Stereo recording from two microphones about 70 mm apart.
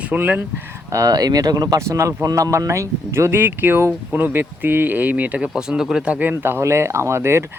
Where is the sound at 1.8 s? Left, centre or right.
Right; by 6.0 s centre.